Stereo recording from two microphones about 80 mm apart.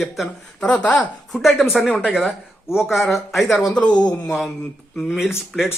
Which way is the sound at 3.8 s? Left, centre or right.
Left.